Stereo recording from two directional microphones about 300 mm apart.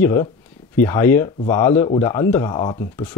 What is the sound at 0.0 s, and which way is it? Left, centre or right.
Speech, centre.